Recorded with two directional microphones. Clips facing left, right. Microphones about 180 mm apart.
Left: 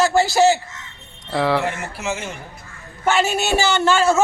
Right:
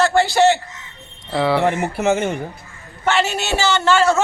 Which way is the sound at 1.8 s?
60° right (ahead or behind).